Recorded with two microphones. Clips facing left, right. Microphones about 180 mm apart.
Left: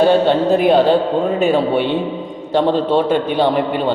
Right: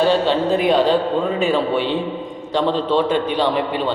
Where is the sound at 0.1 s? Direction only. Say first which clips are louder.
Left 4 dB; 50° left (ahead or behind).